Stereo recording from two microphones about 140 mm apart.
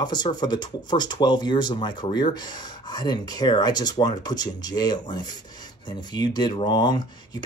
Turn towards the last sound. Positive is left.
turn(degrees=30)  # may be behind; listen again after turning